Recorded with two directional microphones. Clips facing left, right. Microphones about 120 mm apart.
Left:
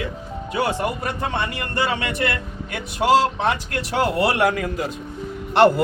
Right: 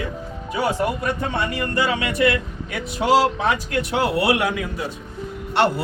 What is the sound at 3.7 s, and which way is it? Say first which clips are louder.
Speech: right 1 dB; 45° left (ahead or behind).